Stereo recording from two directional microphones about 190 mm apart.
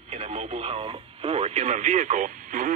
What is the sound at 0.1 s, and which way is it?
Speech, 35° right (ahead or behind).